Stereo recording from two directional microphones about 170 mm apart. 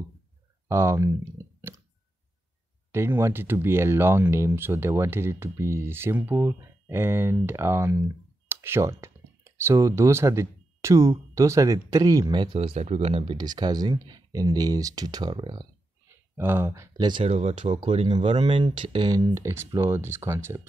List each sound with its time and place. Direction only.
0.7 s speech: 15° right (ahead or behind)
2.9 s speech: 15° right (ahead or behind)
16.3 s speech: 15° right (ahead or behind)
17.2 s speech: 40° right (ahead or behind)
17.7 s speech: 30° right (ahead or behind)